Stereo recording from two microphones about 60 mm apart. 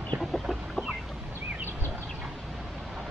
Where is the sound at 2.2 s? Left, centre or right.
Centre.